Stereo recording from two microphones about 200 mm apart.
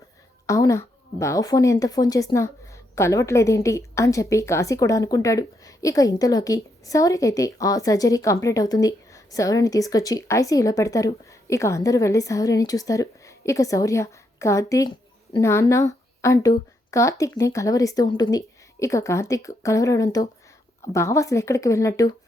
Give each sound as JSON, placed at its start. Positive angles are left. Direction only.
{"t": 0.4, "sound": "a woman's voice", "side_deg": 15}